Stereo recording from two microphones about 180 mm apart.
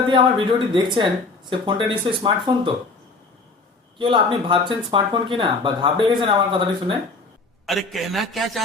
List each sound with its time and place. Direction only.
0.1 s speech: 25° right (ahead or behind)
3.9 s speech: 25° right (ahead or behind)
7.7 s a man's voice: centre (ahead or behind)